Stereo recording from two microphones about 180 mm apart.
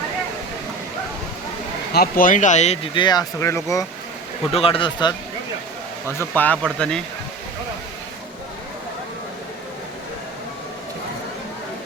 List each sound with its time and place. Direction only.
1.9 s speech: 55° left (ahead or behind); by 3.8 s 15° left (ahead or behind)
4.5 s speech: 30° left (ahead or behind)
6.1 s speech: 10° left (ahead or behind)